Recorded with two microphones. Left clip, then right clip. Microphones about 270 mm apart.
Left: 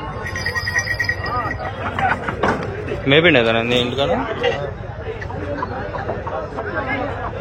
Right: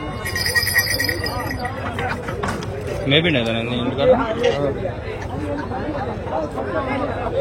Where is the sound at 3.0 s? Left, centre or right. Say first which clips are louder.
Left 5 dB; centre.